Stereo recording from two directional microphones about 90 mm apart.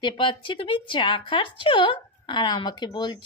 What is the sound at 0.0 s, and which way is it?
Speech, 60° left (ahead or behind).